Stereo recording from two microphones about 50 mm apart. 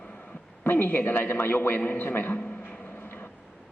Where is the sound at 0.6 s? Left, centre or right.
Left.